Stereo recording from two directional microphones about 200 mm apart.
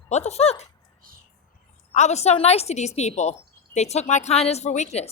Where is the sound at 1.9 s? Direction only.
35° left (ahead or behind).